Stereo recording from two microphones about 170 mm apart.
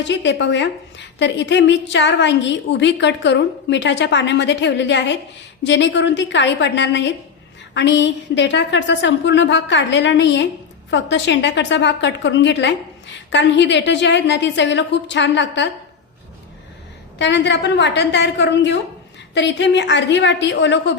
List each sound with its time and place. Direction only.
0.1 s a woman's voice: 90° left
17.2 s a woman's voice: 90° left